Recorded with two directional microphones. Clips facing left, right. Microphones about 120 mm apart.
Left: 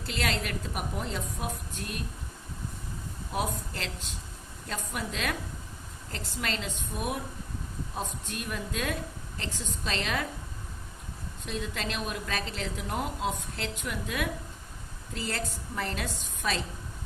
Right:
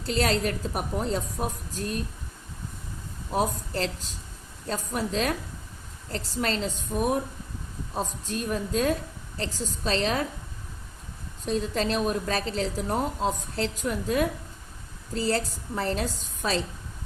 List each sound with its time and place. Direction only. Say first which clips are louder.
0.0 s a woman's voice: right 7 dB; 35° right (ahead or behind)
3.3 s a woman's voice: right 6 dB; 35° right (ahead or behind)
11.4 s a woman's voice: right 8 dB; 35° right (ahead or behind)